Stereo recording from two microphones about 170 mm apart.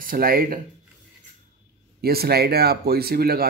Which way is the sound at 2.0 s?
65° right (ahead or behind).